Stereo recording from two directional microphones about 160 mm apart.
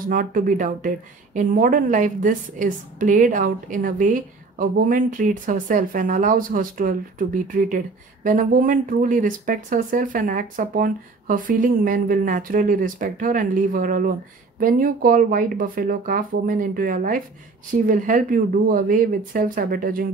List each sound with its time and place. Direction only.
0.1 s a woman's voice: 60° right (ahead or behind)